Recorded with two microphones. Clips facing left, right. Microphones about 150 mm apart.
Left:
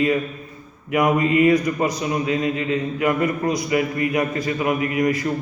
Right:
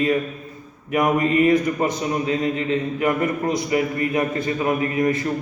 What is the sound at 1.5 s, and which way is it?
A man's voice, 25° right (ahead or behind).